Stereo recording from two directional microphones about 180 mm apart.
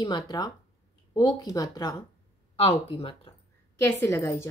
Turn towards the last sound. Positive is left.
turn(degrees=15)  # may be behind; listen again after turning